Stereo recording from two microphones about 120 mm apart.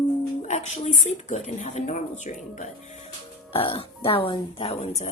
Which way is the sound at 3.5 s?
50° left (ahead or behind).